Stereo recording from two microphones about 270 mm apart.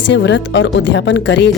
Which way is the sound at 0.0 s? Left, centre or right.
Left.